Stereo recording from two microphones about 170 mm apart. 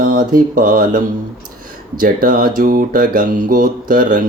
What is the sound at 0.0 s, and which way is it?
Speech, 55° right (ahead or behind).